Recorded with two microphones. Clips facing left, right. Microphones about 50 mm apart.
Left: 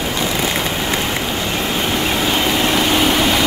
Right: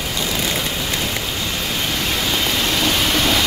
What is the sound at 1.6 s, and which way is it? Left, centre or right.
Vehicle, left.